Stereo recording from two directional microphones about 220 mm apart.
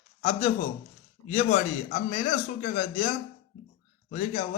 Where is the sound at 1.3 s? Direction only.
35° left (ahead or behind).